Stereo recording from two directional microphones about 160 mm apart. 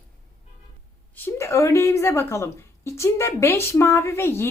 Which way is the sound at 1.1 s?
15° left (ahead or behind).